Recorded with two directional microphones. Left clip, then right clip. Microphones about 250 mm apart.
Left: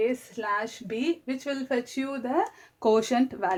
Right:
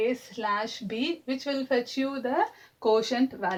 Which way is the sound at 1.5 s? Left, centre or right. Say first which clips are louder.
Right 2 dB; left.